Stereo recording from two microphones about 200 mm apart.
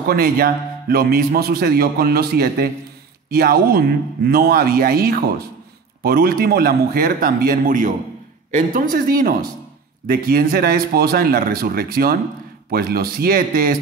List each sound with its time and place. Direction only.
0.1 s a man's voice: 50° right (ahead or behind)